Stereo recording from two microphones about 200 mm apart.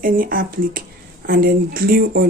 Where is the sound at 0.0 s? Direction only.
45° right (ahead or behind).